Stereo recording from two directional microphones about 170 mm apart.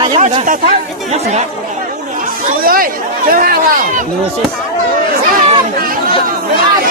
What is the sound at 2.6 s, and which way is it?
Speech, 55° right (ahead or behind).